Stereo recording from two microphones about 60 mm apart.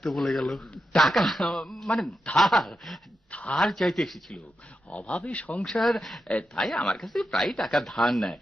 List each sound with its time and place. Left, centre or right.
0.0 s speech: centre
3.3 s a man's voice: left
3.6 s speech: centre
5.3 s speech: left
5.6 s speech: centre